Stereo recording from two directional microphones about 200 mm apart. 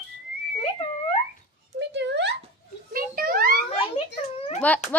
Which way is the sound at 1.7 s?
60° right (ahead or behind).